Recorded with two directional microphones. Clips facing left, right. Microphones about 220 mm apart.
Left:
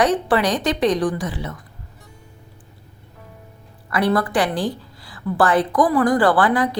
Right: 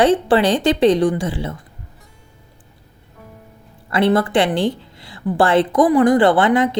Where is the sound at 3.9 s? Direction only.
25° right (ahead or behind).